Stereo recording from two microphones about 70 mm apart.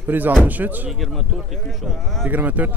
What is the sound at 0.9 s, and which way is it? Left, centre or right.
Speech, centre.